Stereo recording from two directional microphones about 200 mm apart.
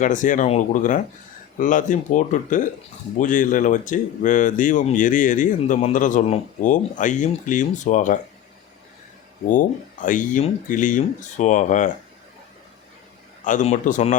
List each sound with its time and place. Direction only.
0.0 s speech: 40° left (ahead or behind)
9.5 s speech: 40° left (ahead or behind)
13.4 s speech: 40° left (ahead or behind)